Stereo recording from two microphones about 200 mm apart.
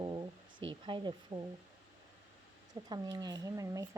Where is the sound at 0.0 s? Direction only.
20° right (ahead or behind).